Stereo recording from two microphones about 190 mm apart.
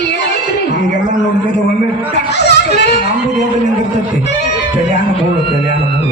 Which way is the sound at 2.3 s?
60° left (ahead or behind).